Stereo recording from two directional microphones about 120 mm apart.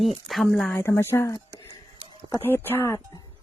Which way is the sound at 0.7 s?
20° left (ahead or behind).